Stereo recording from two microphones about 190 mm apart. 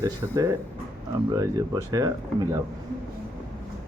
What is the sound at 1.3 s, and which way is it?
Speech, 20° right (ahead or behind).